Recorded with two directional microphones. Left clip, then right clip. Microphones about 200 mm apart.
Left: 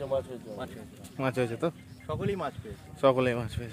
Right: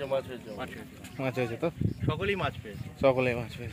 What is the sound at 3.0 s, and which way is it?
Speech, 15° left (ahead or behind).